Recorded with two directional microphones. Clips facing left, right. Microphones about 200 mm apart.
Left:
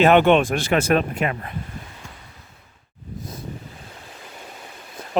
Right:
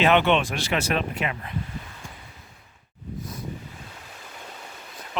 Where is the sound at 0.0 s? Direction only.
50° left (ahead or behind).